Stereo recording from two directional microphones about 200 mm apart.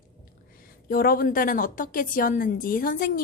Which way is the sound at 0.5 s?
45° left (ahead or behind).